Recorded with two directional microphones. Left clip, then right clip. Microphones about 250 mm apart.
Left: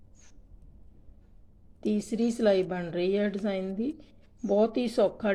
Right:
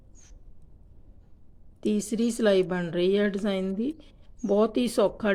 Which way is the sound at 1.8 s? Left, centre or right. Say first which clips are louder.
Right 2 dB; centre.